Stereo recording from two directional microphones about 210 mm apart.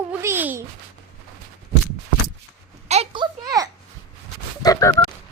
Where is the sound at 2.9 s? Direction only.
25° right (ahead or behind).